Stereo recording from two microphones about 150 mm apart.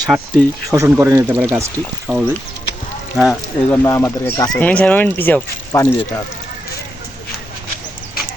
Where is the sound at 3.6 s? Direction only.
15° left (ahead or behind).